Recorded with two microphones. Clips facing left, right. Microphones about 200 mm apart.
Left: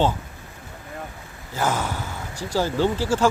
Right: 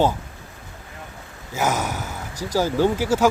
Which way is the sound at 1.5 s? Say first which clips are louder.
Right 1 dB; 15° right (ahead or behind).